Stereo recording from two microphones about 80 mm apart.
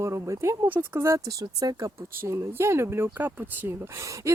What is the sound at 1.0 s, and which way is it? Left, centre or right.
Speech, right.